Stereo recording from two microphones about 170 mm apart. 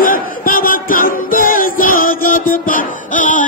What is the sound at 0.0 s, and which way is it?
Battle cry, 55° left (ahead or behind).